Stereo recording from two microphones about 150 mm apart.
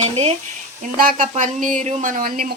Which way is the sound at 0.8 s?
65° right (ahead or behind).